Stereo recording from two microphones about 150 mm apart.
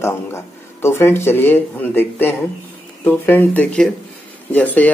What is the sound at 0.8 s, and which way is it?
A man's voice, 15° left (ahead or behind).